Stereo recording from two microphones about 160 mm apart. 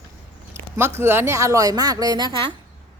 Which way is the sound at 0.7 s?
15° right (ahead or behind).